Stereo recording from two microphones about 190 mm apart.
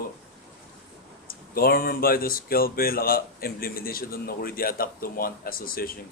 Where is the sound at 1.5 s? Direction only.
50° left (ahead or behind).